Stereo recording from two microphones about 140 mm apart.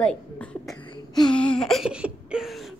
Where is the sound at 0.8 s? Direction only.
35° left (ahead or behind).